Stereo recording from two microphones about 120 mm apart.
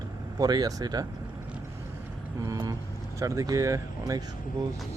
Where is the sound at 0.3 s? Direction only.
35° right (ahead or behind).